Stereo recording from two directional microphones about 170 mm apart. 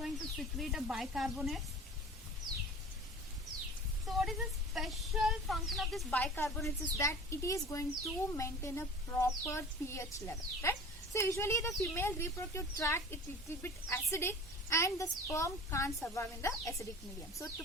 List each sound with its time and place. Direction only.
0.0 s speech: centre (ahead or behind)
4.0 s speech: centre (ahead or behind); by 17.5 s 20° left (ahead or behind)